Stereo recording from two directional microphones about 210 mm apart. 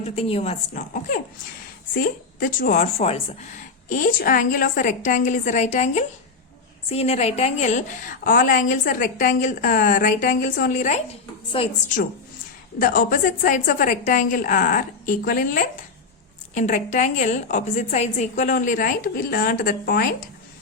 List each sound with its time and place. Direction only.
0.0 s speech: 30° left (ahead or behind)
12.8 s speech: 40° left (ahead or behind)